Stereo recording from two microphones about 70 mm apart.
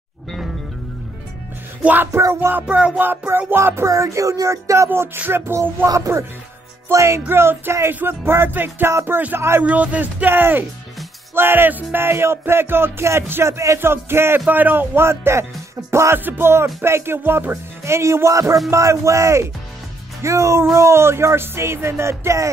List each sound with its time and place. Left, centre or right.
1.8 s speech: right
2.1 s music: right
3.0 s music: right
3.9 s a sound: right
4.8 s music: right
5.9 s a sound: right
7.2 s music: right
9.6 s speech: right
11.3 s music: right
18.7 s a sound: right
20.2 s music: right